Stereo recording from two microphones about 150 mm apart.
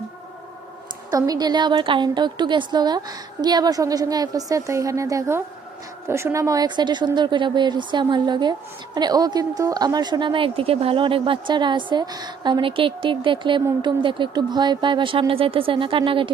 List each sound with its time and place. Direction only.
1.1 s a woman's voice: 25° right (ahead or behind)